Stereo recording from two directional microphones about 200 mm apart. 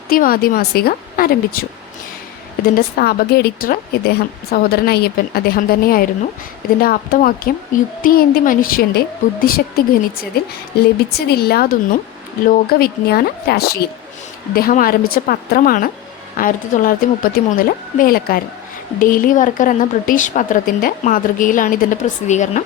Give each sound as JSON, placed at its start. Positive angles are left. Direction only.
{"t": 0.1, "sound": "a woman's voice", "side_deg": 45}
{"t": 3.0, "sound": "a woman's voice", "side_deg": 50}